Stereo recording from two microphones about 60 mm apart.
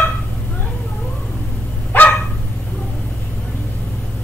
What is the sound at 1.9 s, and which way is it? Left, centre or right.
Dog, left.